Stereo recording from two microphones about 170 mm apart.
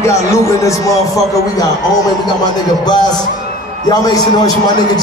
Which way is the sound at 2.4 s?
25° left (ahead or behind).